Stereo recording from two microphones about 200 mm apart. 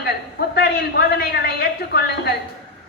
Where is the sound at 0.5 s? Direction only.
55° left (ahead or behind).